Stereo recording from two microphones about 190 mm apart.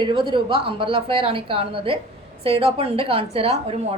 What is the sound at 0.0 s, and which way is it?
A woman's voice, 25° right (ahead or behind).